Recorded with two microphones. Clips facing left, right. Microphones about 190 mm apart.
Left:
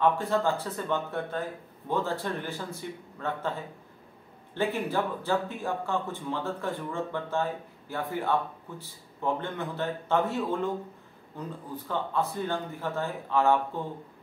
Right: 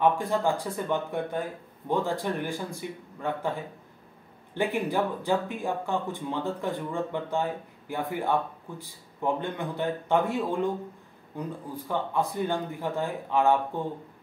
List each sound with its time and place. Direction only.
0.0 s speech: 15° right (ahead or behind)
4.6 s speech: 15° right (ahead or behind)